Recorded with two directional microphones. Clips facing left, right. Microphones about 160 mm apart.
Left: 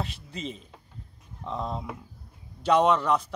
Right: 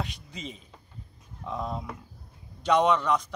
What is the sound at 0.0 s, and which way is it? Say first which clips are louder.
A man's voice: left 2 dB; centre (ahead or behind).